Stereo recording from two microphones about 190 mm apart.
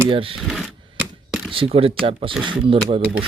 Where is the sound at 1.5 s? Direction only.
30° right (ahead or behind).